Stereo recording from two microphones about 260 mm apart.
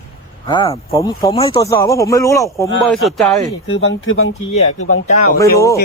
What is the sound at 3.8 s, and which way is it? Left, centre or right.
Speech, left.